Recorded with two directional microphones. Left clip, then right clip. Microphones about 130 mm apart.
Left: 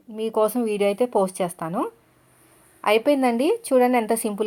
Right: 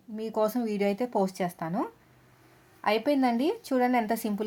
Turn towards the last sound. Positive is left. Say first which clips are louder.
# left 6 dB
turn(degrees=10)  # may be behind; listen again after turning